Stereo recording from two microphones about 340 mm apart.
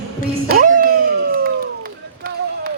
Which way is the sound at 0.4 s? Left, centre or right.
Right.